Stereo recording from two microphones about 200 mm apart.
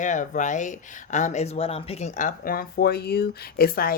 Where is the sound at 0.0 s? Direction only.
40° left (ahead or behind).